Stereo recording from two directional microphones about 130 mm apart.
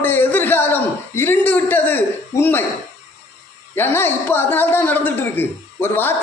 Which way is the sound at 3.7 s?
15° left (ahead or behind).